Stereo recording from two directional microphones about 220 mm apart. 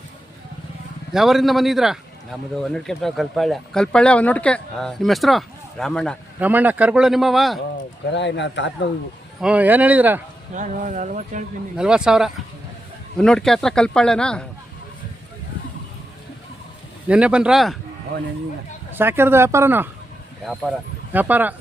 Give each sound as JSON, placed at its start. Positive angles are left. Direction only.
{"t": 1.1, "sound": "speech", "side_deg": 0}
{"t": 6.4, "sound": "speech", "side_deg": -5}
{"t": 8.1, "sound": "speech", "side_deg": 55}
{"t": 9.4, "sound": "speech", "side_deg": -5}
{"t": 10.5, "sound": "speech", "side_deg": -35}
{"t": 11.8, "sound": "speech", "side_deg": -5}
{"t": 17.1, "sound": "speech", "side_deg": -5}
{"t": 18.9, "sound": "speech", "side_deg": -10}
{"t": 21.1, "sound": "speech", "side_deg": -10}